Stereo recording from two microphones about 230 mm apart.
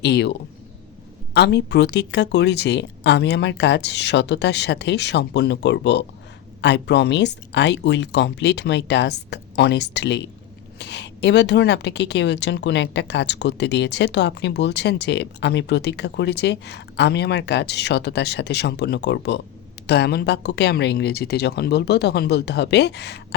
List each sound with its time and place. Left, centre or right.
0.0 s speech: left